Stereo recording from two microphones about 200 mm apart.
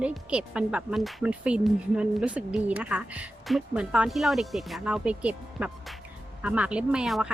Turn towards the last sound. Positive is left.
turn(degrees=-5)  # may be behind; listen again after turning